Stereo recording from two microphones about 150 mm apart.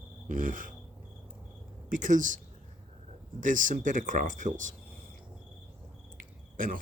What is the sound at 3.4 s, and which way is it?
Speech, 60° right (ahead or behind).